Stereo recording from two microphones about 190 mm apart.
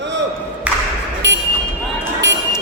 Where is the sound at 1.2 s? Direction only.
70° right (ahead or behind).